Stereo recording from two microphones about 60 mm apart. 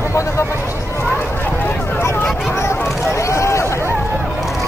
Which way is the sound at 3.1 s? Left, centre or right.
Left.